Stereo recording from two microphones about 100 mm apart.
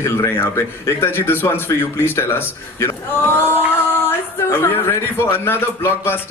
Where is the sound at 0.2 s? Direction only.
30° left (ahead or behind).